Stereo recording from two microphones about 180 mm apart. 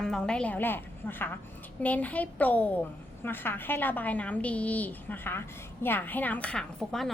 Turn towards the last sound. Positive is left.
turn(degrees=0)  # may be behind; listen again after turning